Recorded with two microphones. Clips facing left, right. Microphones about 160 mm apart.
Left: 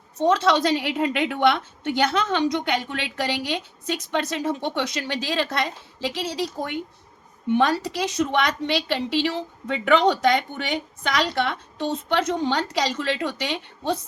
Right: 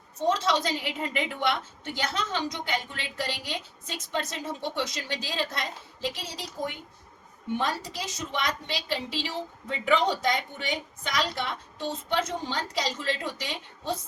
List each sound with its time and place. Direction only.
0.2 s a woman's voice: 70° left (ahead or behind)